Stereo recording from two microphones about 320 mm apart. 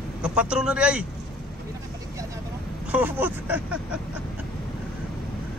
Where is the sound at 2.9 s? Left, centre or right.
Centre.